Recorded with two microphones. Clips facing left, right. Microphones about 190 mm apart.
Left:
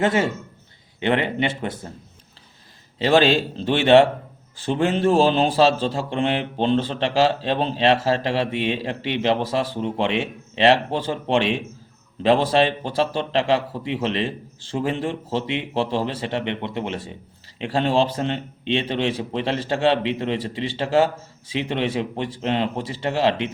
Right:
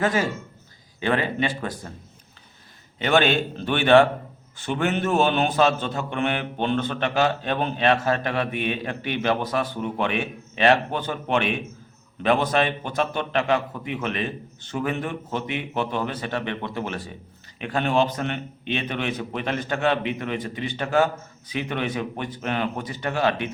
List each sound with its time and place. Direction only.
0.0 s a man's voice: 25° left (ahead or behind)
3.0 s a man's voice: 30° left (ahead or behind)